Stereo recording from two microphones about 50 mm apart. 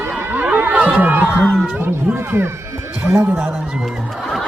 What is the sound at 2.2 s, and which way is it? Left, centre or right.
Speech, right.